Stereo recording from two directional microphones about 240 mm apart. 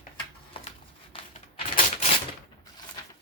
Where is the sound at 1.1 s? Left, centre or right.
Left.